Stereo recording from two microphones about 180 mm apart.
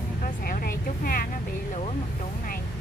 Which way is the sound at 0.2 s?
55° left (ahead or behind).